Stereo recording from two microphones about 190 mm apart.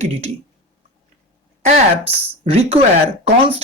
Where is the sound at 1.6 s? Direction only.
35° right (ahead or behind).